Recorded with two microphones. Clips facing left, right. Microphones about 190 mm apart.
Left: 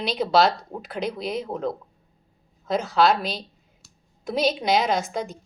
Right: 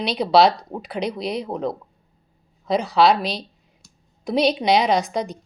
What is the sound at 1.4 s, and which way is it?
Speech, 70° right (ahead or behind).